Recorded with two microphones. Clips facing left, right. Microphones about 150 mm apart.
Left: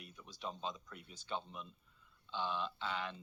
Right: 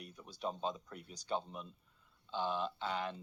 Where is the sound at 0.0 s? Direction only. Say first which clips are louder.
Right 5 dB; 40° right (ahead or behind).